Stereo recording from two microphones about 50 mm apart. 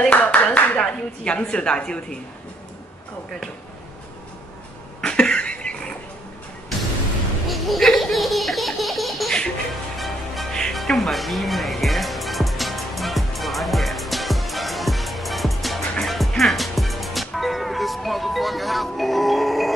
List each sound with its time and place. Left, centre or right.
0.1 s a sound: left
0.7 s speech: centre
5.0 s cough: centre
7.4 s baby laughter: centre
9.9 s music: centre